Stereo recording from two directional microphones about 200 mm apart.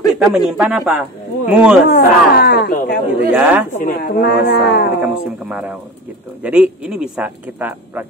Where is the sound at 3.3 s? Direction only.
10° right (ahead or behind).